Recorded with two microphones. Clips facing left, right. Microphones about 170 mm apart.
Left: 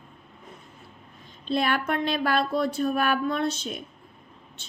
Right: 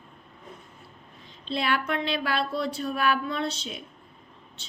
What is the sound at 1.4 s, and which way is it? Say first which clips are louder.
Speech: left 3 dB; 50° left (ahead or behind).